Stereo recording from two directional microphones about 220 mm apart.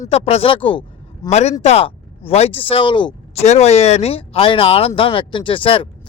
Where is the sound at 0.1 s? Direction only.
25° left (ahead or behind).